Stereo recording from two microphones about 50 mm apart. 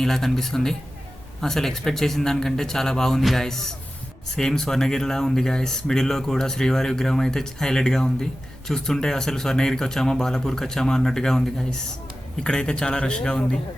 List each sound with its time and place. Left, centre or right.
0.0 s speech: centre